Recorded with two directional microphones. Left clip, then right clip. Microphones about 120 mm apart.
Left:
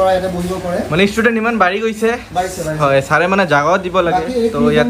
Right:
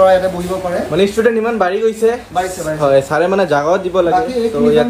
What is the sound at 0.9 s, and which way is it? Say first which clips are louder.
Speech: right 1 dB; 25° right (ahead or behind).